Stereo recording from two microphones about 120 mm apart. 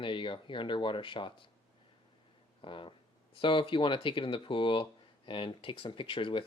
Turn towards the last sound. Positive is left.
turn(degrees=45)  # may be behind; listen again after turning